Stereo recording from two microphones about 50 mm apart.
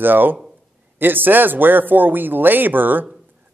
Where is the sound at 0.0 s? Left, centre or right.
Right.